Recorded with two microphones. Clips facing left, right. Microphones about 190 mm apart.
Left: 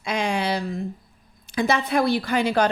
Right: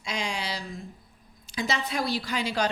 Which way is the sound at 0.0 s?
55° left (ahead or behind).